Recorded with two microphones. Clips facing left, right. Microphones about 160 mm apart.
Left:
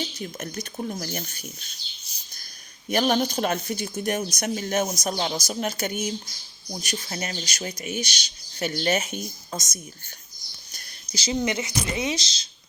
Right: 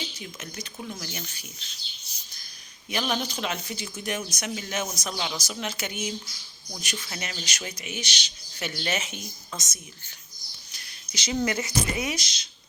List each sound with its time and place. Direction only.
0.2 s speech: 45° left (ahead or behind)
2.9 s speech: 45° left (ahead or behind)
10.7 s a sound: 35° left (ahead or behind)
11.3 s speech: 20° left (ahead or behind)